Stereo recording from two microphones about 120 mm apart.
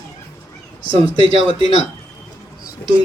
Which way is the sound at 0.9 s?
50° right (ahead or behind).